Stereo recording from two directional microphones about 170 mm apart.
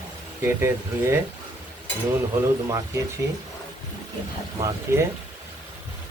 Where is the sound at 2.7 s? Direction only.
20° right (ahead or behind).